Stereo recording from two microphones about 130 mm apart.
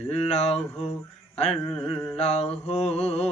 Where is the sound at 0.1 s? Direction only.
55° left (ahead or behind).